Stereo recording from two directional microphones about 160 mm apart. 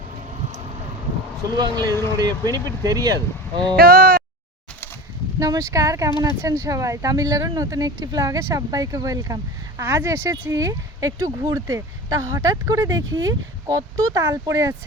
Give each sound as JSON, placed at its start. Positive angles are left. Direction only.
{"t": 1.5, "sound": "speech", "side_deg": -25}
{"t": 3.8, "sound": "speech", "side_deg": -65}
{"t": 5.4, "sound": "speech", "side_deg": -20}